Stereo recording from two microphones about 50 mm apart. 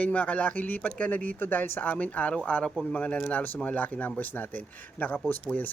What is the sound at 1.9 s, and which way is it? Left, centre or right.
Speech, left.